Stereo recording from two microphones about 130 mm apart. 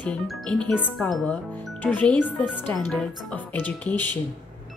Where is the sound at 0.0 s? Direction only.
10° left (ahead or behind).